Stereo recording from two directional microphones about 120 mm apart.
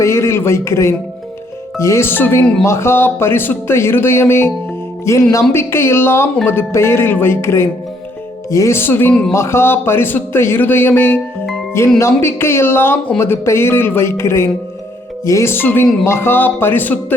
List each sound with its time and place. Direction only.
0.0 s speech: 25° left (ahead or behind)